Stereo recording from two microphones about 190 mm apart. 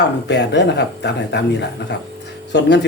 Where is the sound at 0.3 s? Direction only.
65° left (ahead or behind).